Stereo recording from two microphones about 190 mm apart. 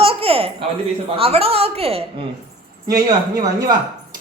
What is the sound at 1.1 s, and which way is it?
Speech, 30° right (ahead or behind).